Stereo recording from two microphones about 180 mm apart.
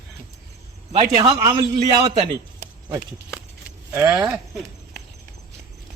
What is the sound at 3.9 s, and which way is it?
Speech, 15° right (ahead or behind).